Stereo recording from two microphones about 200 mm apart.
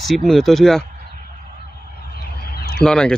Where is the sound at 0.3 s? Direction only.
Centre (ahead or behind).